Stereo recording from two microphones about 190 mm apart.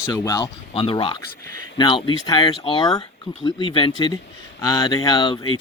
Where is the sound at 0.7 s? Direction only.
30° left (ahead or behind).